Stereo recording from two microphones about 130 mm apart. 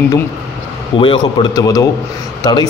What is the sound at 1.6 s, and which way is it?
A man's voice, 25° left (ahead or behind).